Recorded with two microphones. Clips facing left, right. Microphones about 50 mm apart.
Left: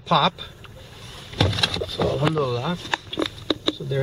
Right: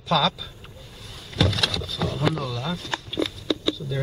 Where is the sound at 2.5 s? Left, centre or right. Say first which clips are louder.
Left 4 dB; centre.